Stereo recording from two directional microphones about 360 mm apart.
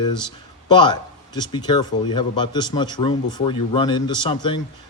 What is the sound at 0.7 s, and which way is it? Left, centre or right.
A man's voice, centre.